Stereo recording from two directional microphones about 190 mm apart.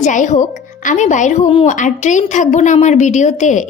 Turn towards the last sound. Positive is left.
turn(degrees=40)  # may be behind; listen again after turning